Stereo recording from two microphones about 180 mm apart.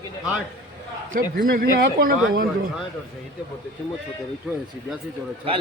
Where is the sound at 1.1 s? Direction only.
50° right (ahead or behind).